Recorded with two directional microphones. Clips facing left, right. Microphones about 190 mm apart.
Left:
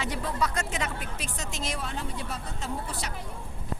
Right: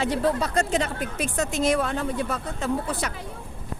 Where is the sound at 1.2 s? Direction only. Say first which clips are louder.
Right 15 dB; 55° right (ahead or behind).